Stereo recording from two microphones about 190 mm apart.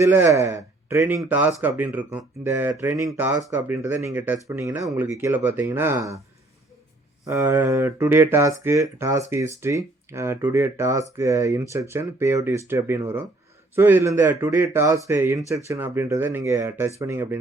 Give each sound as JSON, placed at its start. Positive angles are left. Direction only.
{"t": 0.0, "sound": "speech", "side_deg": -15}
{"t": 7.3, "sound": "speech", "side_deg": -15}